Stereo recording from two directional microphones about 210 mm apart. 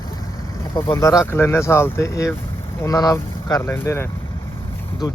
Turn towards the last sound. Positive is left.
turn(degrees=15)  # may be behind; listen again after turning